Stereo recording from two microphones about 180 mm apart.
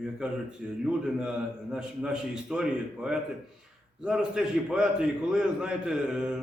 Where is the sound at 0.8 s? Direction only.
5° right (ahead or behind).